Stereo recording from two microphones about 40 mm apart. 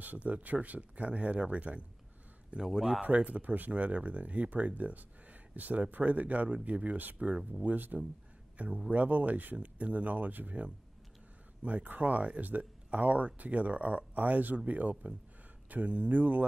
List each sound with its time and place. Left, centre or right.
0.0 s speech: right
2.6 s speech: centre
3.0 s speech: right
7.2 s speech: right
7.6 s speech: right
8.5 s speech: right
11.6 s speech: right